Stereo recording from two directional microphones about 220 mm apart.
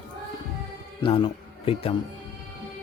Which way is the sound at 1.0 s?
25° left (ahead or behind).